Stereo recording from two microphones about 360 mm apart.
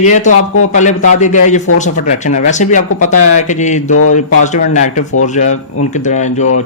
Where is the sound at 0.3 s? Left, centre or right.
Left.